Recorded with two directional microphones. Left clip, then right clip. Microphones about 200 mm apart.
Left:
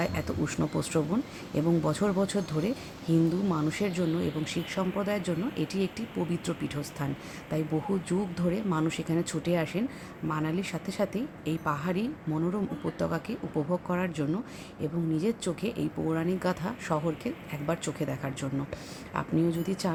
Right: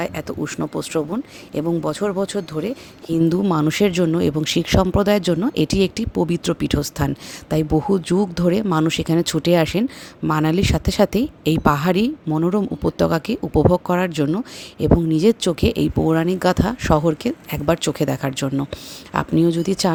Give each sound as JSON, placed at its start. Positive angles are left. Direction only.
{"t": 0.0, "sound": "a woman's voice", "side_deg": -45}